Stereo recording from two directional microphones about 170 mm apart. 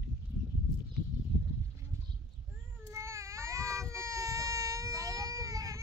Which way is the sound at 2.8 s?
15° right (ahead or behind).